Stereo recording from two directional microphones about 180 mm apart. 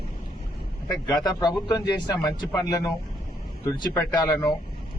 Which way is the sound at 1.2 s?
25° left (ahead or behind).